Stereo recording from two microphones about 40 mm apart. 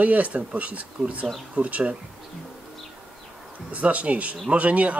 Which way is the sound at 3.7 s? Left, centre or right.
Right.